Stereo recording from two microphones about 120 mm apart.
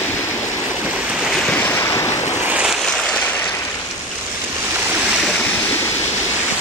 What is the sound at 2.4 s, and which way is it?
Waves, 10° right (ahead or behind).